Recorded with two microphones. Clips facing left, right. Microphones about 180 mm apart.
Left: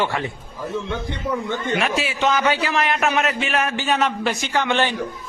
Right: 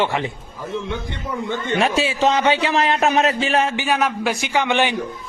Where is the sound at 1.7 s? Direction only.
30° right (ahead or behind).